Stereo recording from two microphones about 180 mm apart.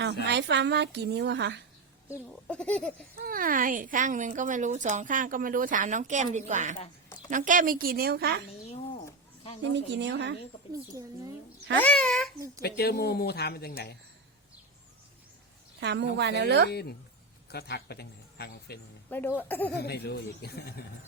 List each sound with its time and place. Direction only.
0.0 s a woman's voice: 75° right (ahead or behind)
2.3 s speech: 5° left (ahead or behind)
3.2 s speech: 55° right (ahead or behind)
8.6 s a sound: 35° left (ahead or behind)
9.7 s a woman's voice: 75° right (ahead or behind)
11.8 s speech: 5° left (ahead or behind)
12.6 s speech: 60° left (ahead or behind)
15.8 s a woman's voice: 75° right (ahead or behind)
17.5 s a man's voice: 65° left (ahead or behind)
19.4 s speech: 10° left (ahead or behind)
19.7 s speech: 65° left (ahead or behind)